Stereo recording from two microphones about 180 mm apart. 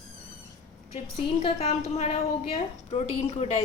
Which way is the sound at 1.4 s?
35° left (ahead or behind).